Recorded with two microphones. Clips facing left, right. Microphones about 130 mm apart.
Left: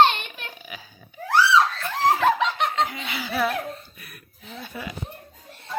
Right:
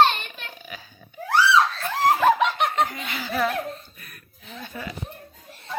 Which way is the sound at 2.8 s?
5° left (ahead or behind).